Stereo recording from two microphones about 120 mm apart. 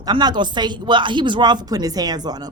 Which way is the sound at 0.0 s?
35° right (ahead or behind).